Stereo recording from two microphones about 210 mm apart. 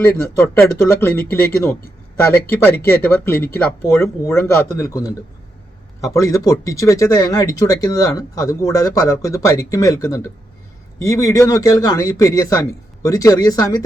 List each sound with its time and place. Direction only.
0.0 s speech: 10° left (ahead or behind)